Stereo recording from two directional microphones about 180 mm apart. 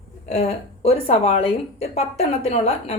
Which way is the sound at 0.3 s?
35° left (ahead or behind).